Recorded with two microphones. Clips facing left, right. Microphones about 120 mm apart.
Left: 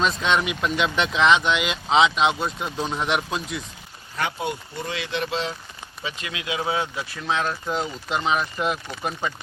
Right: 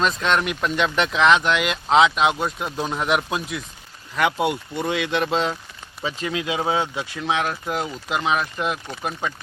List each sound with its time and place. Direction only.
0.0 s speech: centre (ahead or behind)
4.2 s speech: 75° right (ahead or behind); by 5.5 s 45° right (ahead or behind)
6.1 s speech: 30° right (ahead or behind)
7.3 s speech: 15° right (ahead or behind)
7.7 s speech: 5° right (ahead or behind)